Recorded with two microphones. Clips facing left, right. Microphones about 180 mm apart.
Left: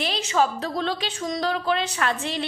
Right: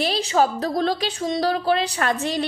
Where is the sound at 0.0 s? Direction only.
35° right (ahead or behind).